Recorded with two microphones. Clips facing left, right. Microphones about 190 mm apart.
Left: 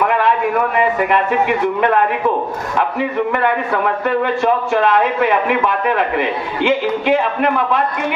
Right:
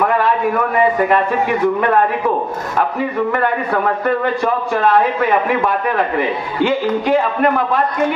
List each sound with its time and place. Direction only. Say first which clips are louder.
3.0 s a man's voice: left 1 dB; 45° right (ahead or behind)